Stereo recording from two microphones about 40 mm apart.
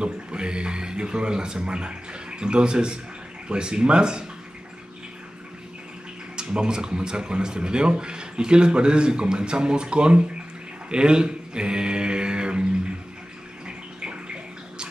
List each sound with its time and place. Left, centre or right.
0.0 s speech: right
6.3 s speech: right
13.7 s bathtub: right